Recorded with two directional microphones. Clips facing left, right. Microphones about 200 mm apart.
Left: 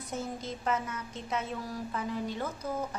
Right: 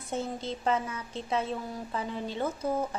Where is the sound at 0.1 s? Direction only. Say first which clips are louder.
Right 4 dB; 30° right (ahead or behind).